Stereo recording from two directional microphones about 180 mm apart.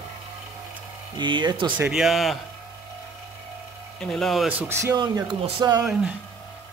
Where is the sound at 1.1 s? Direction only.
25° right (ahead or behind).